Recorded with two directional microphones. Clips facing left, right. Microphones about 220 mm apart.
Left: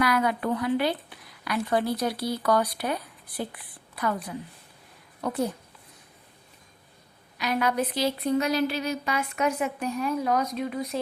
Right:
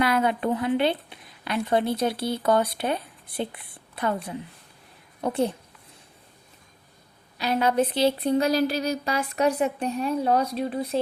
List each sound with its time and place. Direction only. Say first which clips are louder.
0.0 s speech: right 2 dB; 25° right (ahead or behind)
7.3 s speech: right 3 dB; 30° right (ahead or behind)